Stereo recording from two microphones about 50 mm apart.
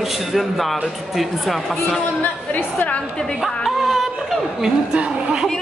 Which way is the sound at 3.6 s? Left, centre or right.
Centre.